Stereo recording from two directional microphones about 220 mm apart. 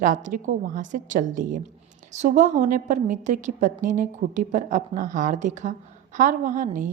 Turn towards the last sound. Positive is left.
turn(degrees=-35)  # may be behind; listen again after turning